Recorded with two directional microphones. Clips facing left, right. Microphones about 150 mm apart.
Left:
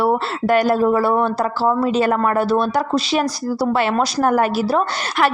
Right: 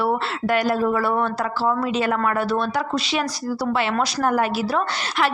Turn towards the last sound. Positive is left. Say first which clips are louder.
# left 4 dB
turn(degrees=40)  # may be behind; listen again after turning